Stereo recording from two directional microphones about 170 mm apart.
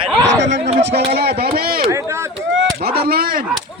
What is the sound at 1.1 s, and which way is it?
Speech, 65° right (ahead or behind).